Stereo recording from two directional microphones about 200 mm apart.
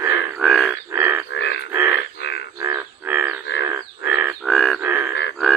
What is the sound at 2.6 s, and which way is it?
Frog, 15° right (ahead or behind).